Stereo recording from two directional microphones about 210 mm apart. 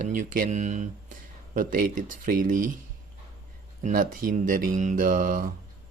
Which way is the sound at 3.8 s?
40° right (ahead or behind).